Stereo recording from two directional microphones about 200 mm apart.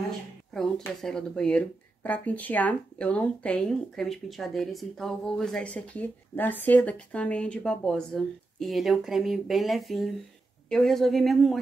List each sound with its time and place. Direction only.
0.5 s speech: centre (ahead or behind)